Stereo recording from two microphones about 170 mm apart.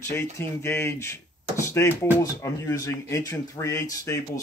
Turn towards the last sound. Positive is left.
turn(degrees=20)  # may be behind; listen again after turning